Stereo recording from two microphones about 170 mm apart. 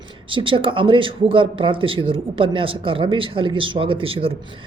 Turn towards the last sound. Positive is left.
turn(degrees=-30)  # may be behind; listen again after turning